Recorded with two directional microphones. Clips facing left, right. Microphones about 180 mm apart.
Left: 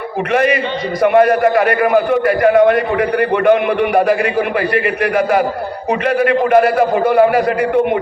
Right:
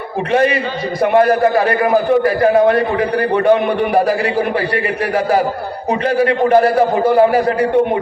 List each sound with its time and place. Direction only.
0.3 s a man's voice: 30° right (ahead or behind)